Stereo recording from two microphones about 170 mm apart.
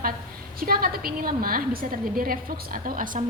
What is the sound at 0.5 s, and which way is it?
A woman's voice, 60° right (ahead or behind).